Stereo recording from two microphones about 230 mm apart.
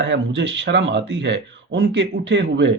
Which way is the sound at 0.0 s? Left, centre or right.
Right.